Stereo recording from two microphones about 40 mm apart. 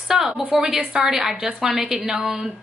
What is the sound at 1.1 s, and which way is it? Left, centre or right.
A woman's voice, centre.